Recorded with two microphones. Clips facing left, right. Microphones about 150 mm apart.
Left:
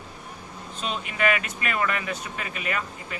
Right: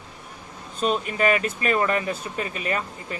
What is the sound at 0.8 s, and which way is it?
Speech, 40° right (ahead or behind).